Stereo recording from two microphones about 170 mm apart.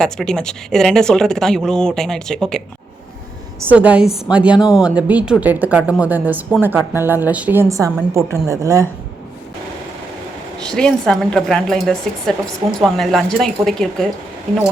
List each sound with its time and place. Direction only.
0.0 s speech: 5° left (ahead or behind)
3.7 s a woman's voice: 5° right (ahead or behind)
10.7 s speech: 5° left (ahead or behind)